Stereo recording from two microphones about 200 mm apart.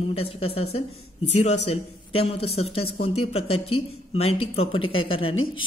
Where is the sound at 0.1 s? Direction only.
30° left (ahead or behind).